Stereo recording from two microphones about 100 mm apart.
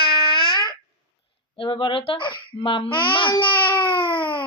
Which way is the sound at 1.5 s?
55° left (ahead or behind).